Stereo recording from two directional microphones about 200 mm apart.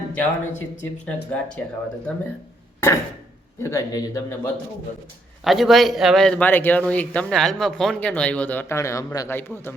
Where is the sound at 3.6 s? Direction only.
15° left (ahead or behind).